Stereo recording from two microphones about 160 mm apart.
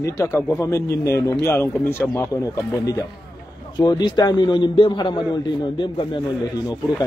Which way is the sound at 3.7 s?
25° left (ahead or behind).